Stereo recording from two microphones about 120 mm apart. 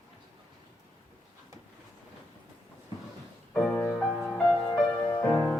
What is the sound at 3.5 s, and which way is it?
Music, 5° left (ahead or behind).